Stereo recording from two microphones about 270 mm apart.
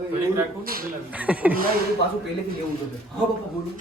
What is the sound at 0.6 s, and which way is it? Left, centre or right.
Speech, right.